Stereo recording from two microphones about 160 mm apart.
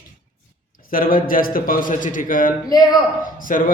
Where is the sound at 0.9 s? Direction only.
60° left (ahead or behind).